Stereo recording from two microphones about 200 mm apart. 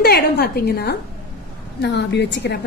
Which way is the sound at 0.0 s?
50° left (ahead or behind).